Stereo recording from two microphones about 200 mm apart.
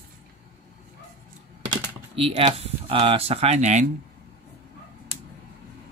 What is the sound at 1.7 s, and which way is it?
Speech, 30° right (ahead or behind).